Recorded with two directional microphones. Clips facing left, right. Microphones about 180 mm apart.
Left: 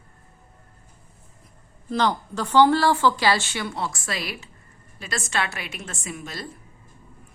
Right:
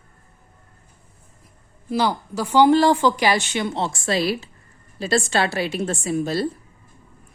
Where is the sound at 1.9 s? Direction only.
10° right (ahead or behind); by 6.5 s 35° right (ahead or behind).